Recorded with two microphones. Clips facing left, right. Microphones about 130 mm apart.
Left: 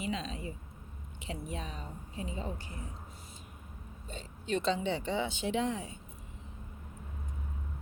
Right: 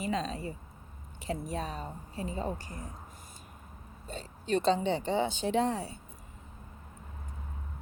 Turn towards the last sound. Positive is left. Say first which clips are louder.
# right 4 dB
turn(degrees=-35)  # may be behind; listen again after turning